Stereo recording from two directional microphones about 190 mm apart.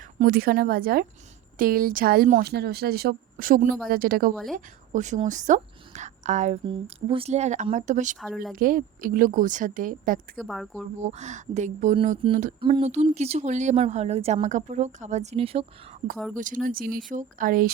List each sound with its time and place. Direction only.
0.3 s a woman's voice: 55° right (ahead or behind)
6.7 s speech: 30° right (ahead or behind)
8.2 s speech: centre (ahead or behind)
8.5 s speech: 45° right (ahead or behind)
10.3 s speech: centre (ahead or behind)
11.0 s speech: 40° right (ahead or behind)
12.5 s speech: 25° right (ahead or behind)
16.3 s speech: 45° right (ahead or behind)